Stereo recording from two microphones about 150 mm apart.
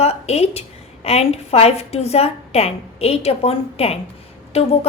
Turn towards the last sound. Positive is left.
turn(degrees=45)  # may be behind; listen again after turning